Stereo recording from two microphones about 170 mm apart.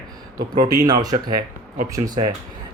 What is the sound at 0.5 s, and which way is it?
Speech, 25° right (ahead or behind).